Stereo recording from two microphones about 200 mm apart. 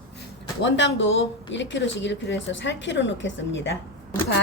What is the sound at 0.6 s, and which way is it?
Speech, 65° left (ahead or behind).